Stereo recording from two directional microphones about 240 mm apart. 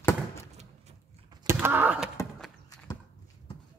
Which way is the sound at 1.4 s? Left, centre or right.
Centre.